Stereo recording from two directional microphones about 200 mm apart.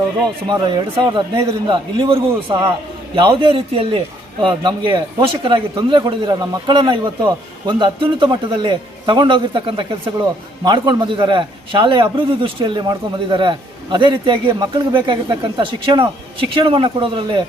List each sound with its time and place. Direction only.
0.4 s a man's voice: 20° right (ahead or behind)